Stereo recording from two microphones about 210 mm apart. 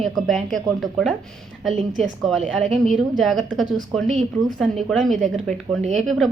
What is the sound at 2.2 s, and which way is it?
A woman's voice, centre (ahead or behind).